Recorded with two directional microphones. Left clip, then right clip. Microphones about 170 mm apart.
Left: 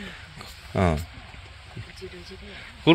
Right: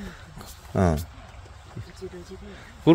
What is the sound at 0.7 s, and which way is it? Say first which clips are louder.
Speech: even; 20° right (ahead or behind).